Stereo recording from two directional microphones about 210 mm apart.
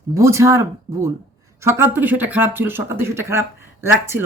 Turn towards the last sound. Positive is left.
turn(degrees=-10)  # may be behind; listen again after turning